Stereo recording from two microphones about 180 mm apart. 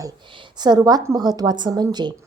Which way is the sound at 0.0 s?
25° right (ahead or behind).